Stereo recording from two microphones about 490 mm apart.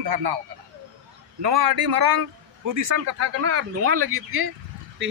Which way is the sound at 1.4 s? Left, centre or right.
Right.